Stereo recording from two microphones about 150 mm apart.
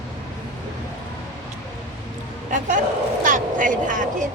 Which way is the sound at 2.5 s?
55° right (ahead or behind).